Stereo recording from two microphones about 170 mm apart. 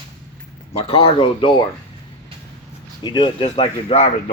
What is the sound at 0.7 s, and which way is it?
Speech, 35° left (ahead or behind).